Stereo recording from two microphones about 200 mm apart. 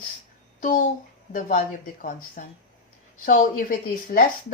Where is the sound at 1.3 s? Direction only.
40° left (ahead or behind).